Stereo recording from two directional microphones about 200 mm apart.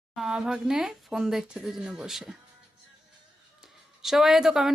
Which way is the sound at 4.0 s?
Centre (ahead or behind).